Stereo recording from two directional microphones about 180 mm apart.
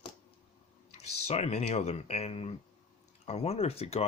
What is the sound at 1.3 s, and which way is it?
Speech, 40° left (ahead or behind).